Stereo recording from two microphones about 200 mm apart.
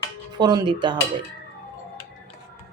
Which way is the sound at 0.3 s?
20° right (ahead or behind).